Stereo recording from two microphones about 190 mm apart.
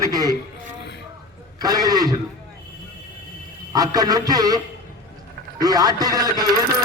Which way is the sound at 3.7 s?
20° right (ahead or behind).